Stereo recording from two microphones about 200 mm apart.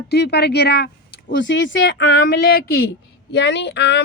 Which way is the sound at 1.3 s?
65° left (ahead or behind).